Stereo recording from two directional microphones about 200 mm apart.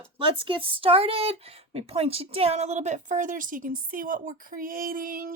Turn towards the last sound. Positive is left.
turn(degrees=-45)  # may be behind; listen again after turning